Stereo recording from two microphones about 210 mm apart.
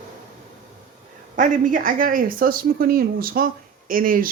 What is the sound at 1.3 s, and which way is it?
A woman's voice, 40° right (ahead or behind).